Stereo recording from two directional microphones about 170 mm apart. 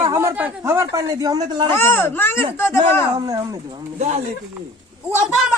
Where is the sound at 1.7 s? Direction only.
15° left (ahead or behind).